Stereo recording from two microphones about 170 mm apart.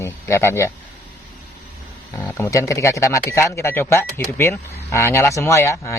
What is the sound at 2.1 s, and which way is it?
Speech, 15° left (ahead or behind).